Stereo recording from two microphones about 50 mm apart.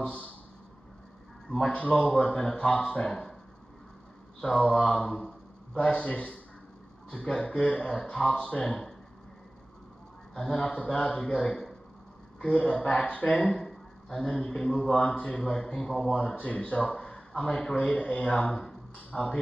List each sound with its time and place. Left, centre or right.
0.0 s speech: left
1.7 s speech: left
4.4 s speech: centre; by 6.4 s left
7.1 s speech: centre
10.3 s a man's voice: centre
10.6 s speech: left
13.5 s speech: centre
15.4 s speech: centre
16.3 s speech: left; by 18.8 s centre
18.9 s speech: left